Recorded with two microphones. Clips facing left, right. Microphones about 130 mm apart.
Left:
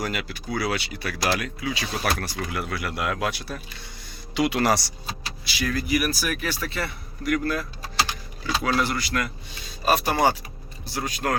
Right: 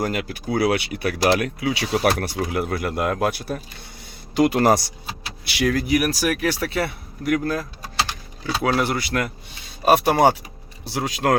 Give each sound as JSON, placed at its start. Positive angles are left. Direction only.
{"t": 0.0, "sound": "speech", "side_deg": -45}
{"t": 2.5, "sound": "speech", "side_deg": -50}
{"t": 5.5, "sound": "speech", "side_deg": -70}
{"t": 8.6, "sound": "speech", "side_deg": -55}
{"t": 10.8, "sound": "speech", "side_deg": -85}